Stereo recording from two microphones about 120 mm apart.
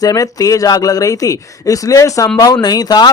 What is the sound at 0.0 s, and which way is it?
Speech, 30° left (ahead or behind).